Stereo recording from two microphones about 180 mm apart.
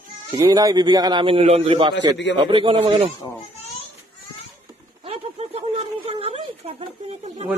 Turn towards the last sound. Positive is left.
turn(degrees=-40)  # may be behind; listen again after turning